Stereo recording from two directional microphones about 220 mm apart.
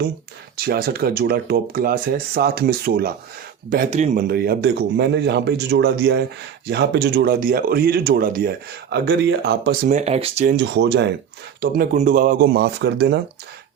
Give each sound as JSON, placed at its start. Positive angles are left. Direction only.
{"t": 0.5, "sound": "speech", "side_deg": -45}
{"t": 9.9, "sound": "speech", "side_deg": -30}
{"t": 11.9, "sound": "speech", "side_deg": -35}